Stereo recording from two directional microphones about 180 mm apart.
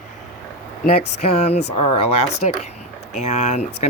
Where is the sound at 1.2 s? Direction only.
40° left (ahead or behind).